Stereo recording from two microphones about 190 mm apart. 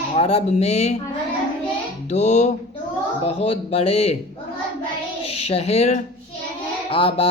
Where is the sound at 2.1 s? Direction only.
35° left (ahead or behind).